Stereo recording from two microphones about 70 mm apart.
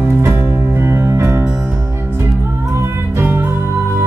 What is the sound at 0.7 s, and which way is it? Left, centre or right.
Music, right.